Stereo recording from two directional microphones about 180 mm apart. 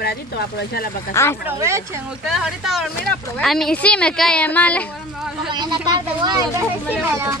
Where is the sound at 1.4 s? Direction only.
15° right (ahead or behind).